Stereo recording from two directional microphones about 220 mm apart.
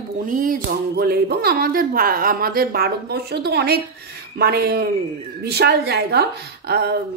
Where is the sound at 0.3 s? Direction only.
40° right (ahead or behind).